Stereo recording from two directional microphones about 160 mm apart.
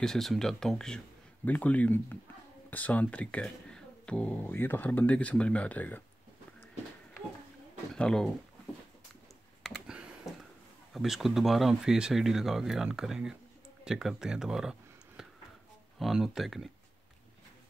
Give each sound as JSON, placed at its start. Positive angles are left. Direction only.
{"t": 0.0, "sound": "speech", "side_deg": 0}
{"t": 7.9, "sound": "speech", "side_deg": 5}
{"t": 9.6, "sound": "computer keyboard", "side_deg": 0}
{"t": 10.9, "sound": "speech", "side_deg": 0}